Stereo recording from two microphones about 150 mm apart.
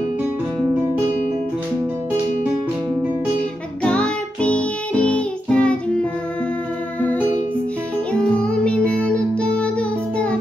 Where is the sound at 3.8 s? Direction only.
5° left (ahead or behind).